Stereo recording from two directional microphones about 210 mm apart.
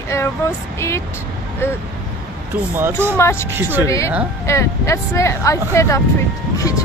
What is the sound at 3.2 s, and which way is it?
Speech, 15° left (ahead or behind).